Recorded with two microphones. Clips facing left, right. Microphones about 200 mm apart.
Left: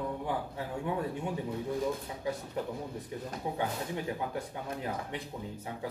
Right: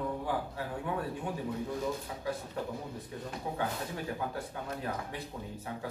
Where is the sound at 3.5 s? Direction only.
20° left (ahead or behind).